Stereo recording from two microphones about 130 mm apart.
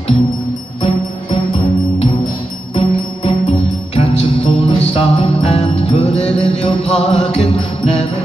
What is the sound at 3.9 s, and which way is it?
Jingle bell, 45° left (ahead or behind).